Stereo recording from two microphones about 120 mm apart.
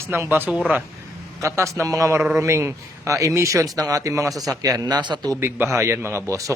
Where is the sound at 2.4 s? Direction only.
20° right (ahead or behind).